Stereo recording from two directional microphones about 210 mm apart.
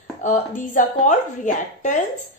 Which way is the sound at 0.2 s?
40° left (ahead or behind).